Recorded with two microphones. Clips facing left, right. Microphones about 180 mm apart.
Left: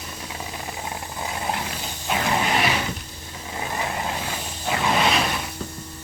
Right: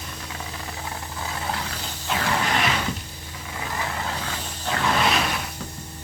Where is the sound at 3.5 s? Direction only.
20° left (ahead or behind).